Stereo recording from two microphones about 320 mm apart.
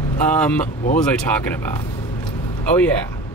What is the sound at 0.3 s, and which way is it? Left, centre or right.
A man's voice, centre.